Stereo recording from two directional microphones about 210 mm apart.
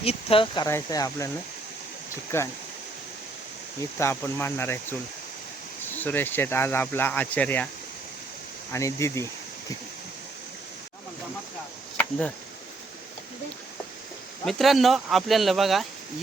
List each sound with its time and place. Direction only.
0.0 s speech: 30° left (ahead or behind)
2.3 s speech: 10° left (ahead or behind)
3.9 s speech: 10° left (ahead or behind)
8.7 s speech: 15° left (ahead or behind)
14.4 s speech: centre (ahead or behind)